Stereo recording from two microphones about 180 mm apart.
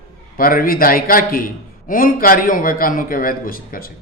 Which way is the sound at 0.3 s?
55° left (ahead or behind).